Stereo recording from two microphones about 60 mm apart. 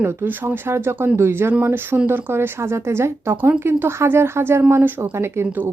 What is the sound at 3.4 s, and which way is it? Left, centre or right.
Speech, right.